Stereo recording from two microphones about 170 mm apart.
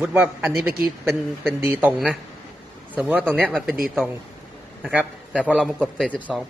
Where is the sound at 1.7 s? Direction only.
10° right (ahead or behind).